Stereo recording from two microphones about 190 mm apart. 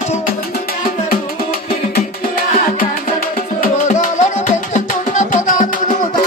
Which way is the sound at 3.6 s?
40° left (ahead or behind).